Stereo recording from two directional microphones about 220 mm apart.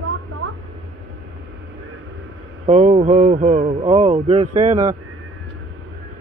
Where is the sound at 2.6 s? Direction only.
30° right (ahead or behind).